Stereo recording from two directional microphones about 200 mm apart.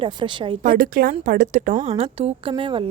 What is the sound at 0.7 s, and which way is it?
Speech, 45° right (ahead or behind).